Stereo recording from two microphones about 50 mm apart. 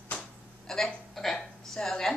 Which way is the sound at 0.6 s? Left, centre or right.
Centre.